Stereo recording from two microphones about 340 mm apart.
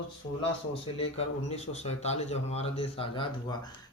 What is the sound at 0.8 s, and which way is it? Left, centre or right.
Speech, centre.